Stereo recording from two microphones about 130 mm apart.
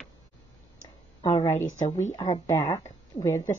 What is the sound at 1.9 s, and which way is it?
Speech, 60° left (ahead or behind).